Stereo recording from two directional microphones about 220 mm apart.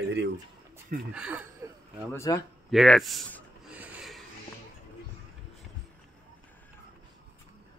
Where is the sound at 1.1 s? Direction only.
5° right (ahead or behind).